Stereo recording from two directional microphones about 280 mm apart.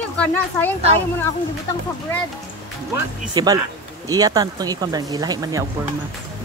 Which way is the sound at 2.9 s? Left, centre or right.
Centre.